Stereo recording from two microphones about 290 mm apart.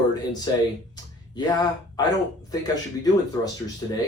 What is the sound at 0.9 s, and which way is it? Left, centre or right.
Speech, centre.